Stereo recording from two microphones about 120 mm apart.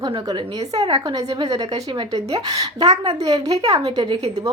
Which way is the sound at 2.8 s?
60° right (ahead or behind).